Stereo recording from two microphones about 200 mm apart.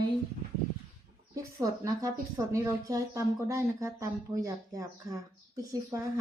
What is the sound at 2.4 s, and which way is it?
Speech, 15° right (ahead or behind).